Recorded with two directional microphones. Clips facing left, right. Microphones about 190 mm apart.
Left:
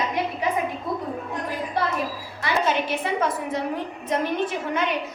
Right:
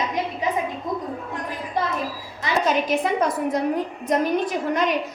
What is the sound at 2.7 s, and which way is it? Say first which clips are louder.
A woman's voice: right 3 dB; 40° right (ahead or behind).